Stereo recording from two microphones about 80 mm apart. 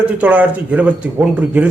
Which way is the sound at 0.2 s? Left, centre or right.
Centre.